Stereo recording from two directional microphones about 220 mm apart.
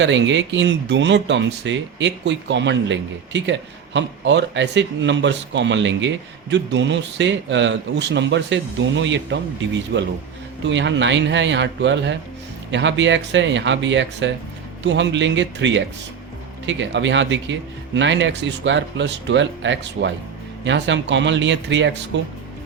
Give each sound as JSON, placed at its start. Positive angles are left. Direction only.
{"t": 0.0, "sound": "speech", "side_deg": -55}